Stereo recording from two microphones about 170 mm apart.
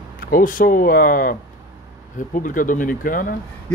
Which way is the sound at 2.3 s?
50° left (ahead or behind).